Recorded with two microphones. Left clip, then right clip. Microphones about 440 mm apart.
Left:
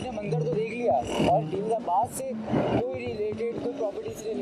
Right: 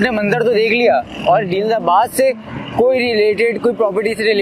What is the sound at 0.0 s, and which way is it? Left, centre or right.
Speech, right.